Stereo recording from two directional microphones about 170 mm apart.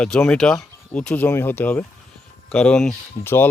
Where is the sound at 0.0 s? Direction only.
5° left (ahead or behind).